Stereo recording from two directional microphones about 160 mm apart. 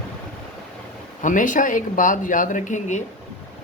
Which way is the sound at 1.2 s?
55° left (ahead or behind).